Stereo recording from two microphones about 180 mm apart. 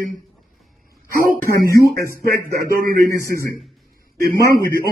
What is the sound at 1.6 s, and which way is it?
Speech, 55° right (ahead or behind).